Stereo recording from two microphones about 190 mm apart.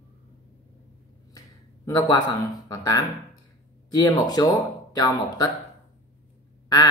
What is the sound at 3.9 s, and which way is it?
Speech, 20° left (ahead or behind).